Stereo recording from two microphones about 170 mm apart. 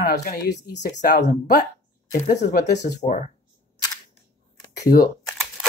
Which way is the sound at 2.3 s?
80° left.